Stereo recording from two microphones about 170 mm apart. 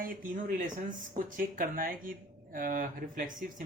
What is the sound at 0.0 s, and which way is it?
Speech, 55° right (ahead or behind).